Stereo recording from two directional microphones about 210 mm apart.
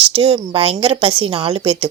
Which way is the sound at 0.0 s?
25° right (ahead or behind).